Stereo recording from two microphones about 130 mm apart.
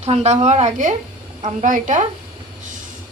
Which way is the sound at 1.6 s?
80° right.